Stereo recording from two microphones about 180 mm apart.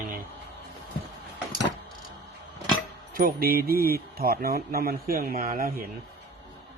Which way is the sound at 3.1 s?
55° right (ahead or behind).